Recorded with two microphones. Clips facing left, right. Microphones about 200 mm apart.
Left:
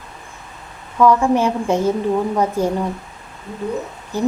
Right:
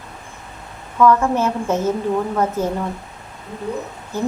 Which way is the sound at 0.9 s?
15° left (ahead or behind).